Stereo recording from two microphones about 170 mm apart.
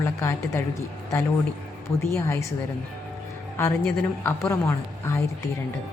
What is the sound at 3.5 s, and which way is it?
A woman's voice, 15° left (ahead or behind).